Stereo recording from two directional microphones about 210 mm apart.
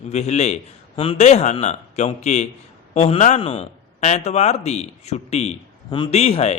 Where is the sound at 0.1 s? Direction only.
30° left (ahead or behind).